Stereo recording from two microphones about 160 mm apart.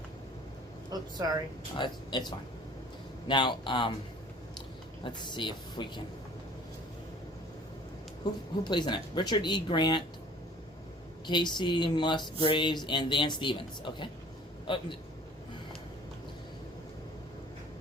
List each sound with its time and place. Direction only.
1.7 s speech: 30° left (ahead or behind)
5.0 s speech: 30° left (ahead or behind)
8.2 s speech: 25° left (ahead or behind)
11.3 s a man's voice: 30° left (ahead or behind)